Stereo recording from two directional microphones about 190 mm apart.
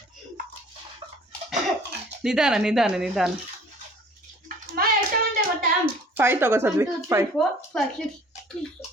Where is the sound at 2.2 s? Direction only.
5° right (ahead or behind).